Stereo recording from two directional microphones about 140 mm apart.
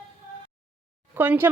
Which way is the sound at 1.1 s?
15° right (ahead or behind).